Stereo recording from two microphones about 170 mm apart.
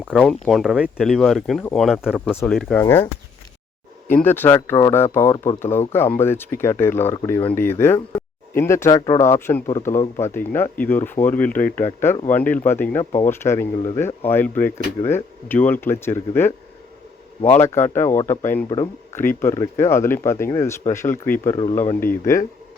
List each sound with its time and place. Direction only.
0.4 s speech: centre (ahead or behind)
2.8 s speech: 15° left (ahead or behind)
4.1 s speech: 10° left (ahead or behind)
17.6 s speech: 15° left (ahead or behind)
21.5 s speech: 25° left (ahead or behind)
21.8 s speech: 15° left (ahead or behind)